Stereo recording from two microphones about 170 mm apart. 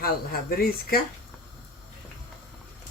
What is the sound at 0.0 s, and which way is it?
Speech, 60° left (ahead or behind).